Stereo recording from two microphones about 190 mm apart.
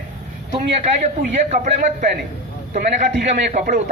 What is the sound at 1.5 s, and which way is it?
Speech, 40° right (ahead or behind).